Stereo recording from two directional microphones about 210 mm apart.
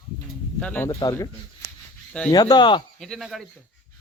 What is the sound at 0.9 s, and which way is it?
Speech, 20° left (ahead or behind).